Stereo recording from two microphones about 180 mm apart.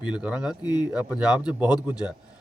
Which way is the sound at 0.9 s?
5° right (ahead or behind).